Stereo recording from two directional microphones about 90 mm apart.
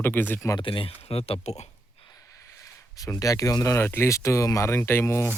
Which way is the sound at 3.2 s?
40° left (ahead or behind).